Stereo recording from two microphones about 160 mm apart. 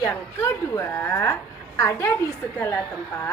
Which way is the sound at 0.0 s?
15° left (ahead or behind).